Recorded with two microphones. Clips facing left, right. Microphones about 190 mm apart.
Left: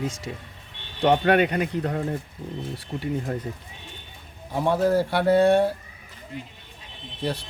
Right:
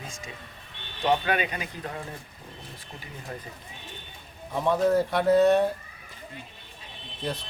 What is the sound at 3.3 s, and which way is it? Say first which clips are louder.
Speech: left 8 dB; 55° left (ahead or behind).